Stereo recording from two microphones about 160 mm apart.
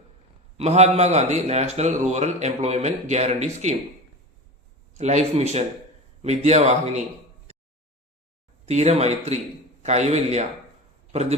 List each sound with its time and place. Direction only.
0.5 s a man's voice: 40° right (ahead or behind)
4.9 s a man's voice: 45° right (ahead or behind)
7.5 s a sound: 45° right (ahead or behind)
8.6 s a man's voice: 40° right (ahead or behind)